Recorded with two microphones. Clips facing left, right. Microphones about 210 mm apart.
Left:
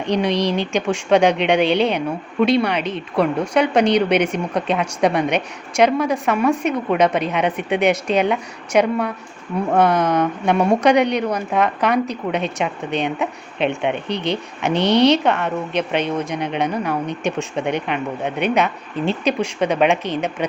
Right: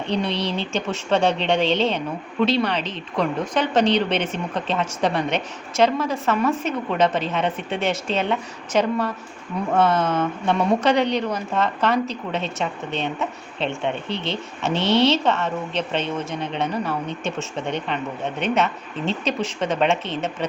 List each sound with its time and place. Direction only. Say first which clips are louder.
0.0 s a woman's voice: left 5 dB; 15° left (ahead or behind)